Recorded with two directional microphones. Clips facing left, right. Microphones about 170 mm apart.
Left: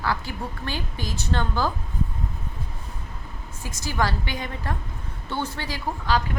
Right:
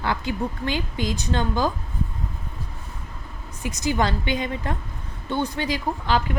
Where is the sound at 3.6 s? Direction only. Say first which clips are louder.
Right 3 dB; 20° right (ahead or behind).